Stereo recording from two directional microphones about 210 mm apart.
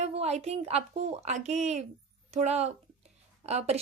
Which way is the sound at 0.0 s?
30° right (ahead or behind).